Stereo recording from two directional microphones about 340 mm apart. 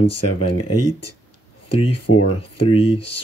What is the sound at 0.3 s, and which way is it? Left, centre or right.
Speech, left.